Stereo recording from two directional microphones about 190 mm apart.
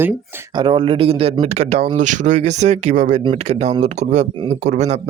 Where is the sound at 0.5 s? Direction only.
25° right (ahead or behind).